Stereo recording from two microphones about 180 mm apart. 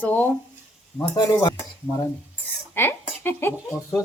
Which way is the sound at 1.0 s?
20° left (ahead or behind).